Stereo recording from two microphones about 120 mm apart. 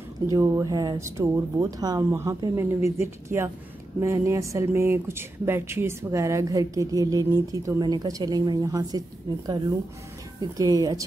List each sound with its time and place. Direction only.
0.3 s speech: 25° right (ahead or behind)
10.4 s a woman's voice: 30° right (ahead or behind)